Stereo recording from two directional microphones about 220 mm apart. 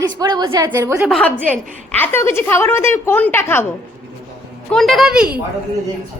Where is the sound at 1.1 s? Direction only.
5° left (ahead or behind).